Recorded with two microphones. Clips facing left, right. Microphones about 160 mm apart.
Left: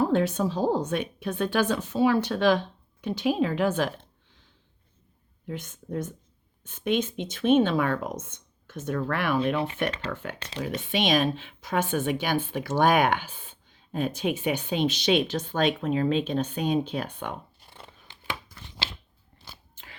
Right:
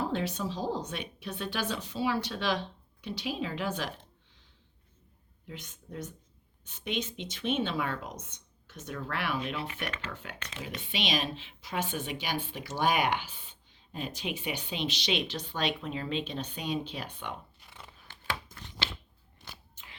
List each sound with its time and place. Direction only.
0.0 s a woman's voice: 50° left (ahead or behind)
5.5 s a woman's voice: 50° left (ahead or behind)
9.6 s speech: 35° left (ahead or behind)
10.8 s a woman's voice: 50° left (ahead or behind)
17.6 s a sound: 30° left (ahead or behind)